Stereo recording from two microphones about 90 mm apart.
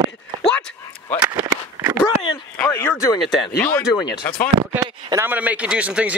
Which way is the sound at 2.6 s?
25° left (ahead or behind).